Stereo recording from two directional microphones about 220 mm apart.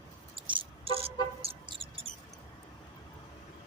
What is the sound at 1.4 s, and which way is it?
Toot, 25° right (ahead or behind).